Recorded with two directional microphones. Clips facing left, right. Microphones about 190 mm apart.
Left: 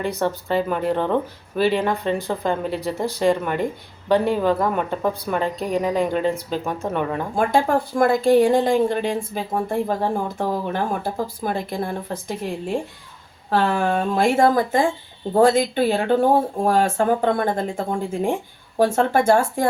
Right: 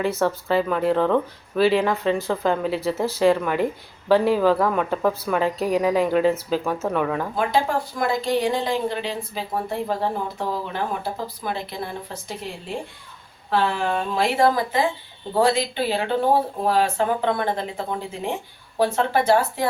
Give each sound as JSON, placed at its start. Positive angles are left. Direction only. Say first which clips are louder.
{"t": 0.0, "sound": "speech", "louder": "right 1 dB", "side_deg": 0}
{"t": 7.3, "sound": "speech", "louder": "left 5 dB", "side_deg": 50}
{"t": 13.5, "sound": "speech", "louder": "left 2 dB", "side_deg": 45}